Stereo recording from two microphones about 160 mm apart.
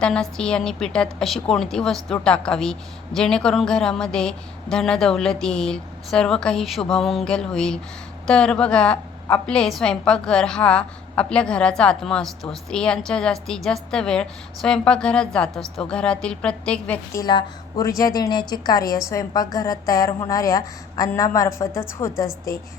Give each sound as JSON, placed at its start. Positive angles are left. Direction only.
{"t": 0.0, "sound": "a woman's voice", "side_deg": 5}
{"t": 17.2, "sound": "a woman's voice", "side_deg": 25}